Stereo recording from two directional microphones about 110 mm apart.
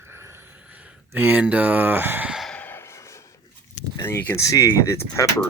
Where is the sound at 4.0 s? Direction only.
20° left (ahead or behind).